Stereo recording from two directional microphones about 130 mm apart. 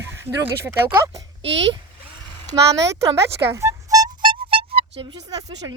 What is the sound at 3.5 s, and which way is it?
Music, 25° right (ahead or behind).